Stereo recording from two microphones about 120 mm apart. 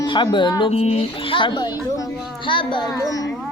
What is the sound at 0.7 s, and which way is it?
Music, 60° left (ahead or behind).